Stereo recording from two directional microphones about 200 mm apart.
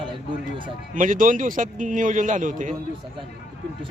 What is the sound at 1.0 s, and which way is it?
A man's voice, 40° right (ahead or behind).